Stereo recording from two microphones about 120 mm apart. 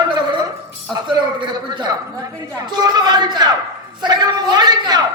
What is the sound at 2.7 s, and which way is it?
Speech, 35° right (ahead or behind).